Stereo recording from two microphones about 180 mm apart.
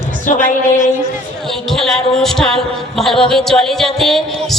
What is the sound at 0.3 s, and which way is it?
Speech, 45° left (ahead or behind).